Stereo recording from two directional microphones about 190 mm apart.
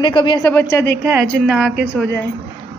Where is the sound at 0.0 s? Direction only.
25° left (ahead or behind).